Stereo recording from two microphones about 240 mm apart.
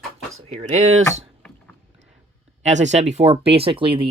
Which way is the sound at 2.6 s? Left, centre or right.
Right.